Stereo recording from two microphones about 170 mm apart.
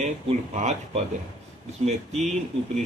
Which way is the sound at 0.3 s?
40° right (ahead or behind).